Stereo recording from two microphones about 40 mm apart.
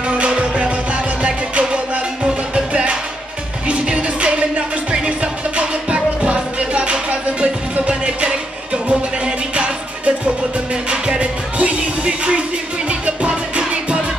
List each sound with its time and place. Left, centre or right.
0.1 s music: right